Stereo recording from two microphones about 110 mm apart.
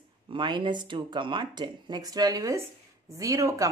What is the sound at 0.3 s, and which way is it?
A woman's voice, 45° right (ahead or behind).